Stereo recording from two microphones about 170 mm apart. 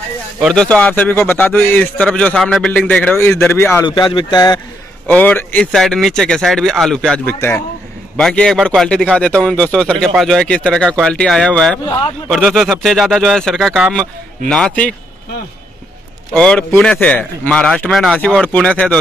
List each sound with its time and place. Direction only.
0.4 s a man's voice: centre (ahead or behind)
3.8 s speech: 25° left (ahead or behind)
5.0 s a man's voice: 10° left (ahead or behind)
8.2 s a man's voice: 5° left (ahead or behind)
16.3 s a man's voice: 5° left (ahead or behind)